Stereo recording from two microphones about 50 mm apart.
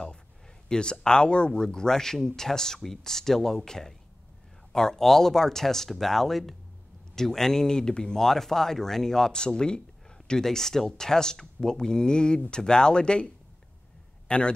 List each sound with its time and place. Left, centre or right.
0.7 s a man's voice: centre